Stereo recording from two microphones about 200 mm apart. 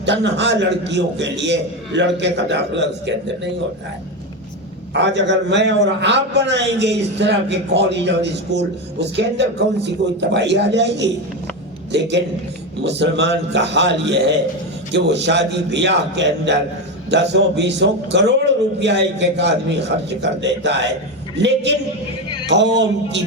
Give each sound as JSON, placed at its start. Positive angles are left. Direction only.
{"t": 0.0, "sound": "a man's voice", "side_deg": -60}
{"t": 4.9, "sound": "a man's voice", "side_deg": -60}